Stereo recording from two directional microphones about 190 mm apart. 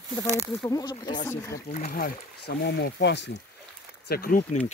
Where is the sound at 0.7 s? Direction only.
20° left (ahead or behind).